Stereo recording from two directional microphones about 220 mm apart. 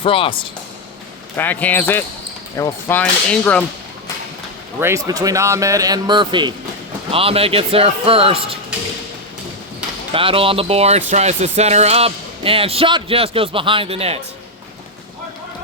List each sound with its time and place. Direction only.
0.0 s speech: 25° left (ahead or behind)
1.4 s cap gun: 5° left (ahead or behind)
4.8 s a man's voice: 15° right (ahead or behind)
10.1 s speech: 25° right (ahead or behind)